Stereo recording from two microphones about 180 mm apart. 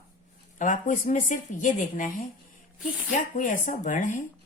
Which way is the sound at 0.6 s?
45° left (ahead or behind).